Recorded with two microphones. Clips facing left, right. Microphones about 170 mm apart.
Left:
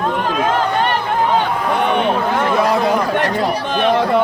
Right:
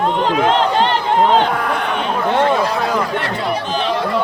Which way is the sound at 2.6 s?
55° left (ahead or behind).